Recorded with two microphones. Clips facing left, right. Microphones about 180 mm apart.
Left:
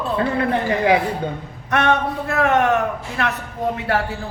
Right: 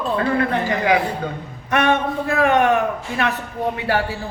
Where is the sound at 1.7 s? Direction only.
Centre (ahead or behind).